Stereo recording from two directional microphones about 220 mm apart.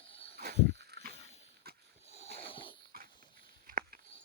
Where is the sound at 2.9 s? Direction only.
40° right (ahead or behind).